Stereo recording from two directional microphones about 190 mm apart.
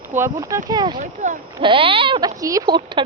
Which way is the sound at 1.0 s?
40° right (ahead or behind).